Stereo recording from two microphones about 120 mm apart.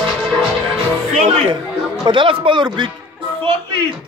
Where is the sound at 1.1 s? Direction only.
75° right (ahead or behind).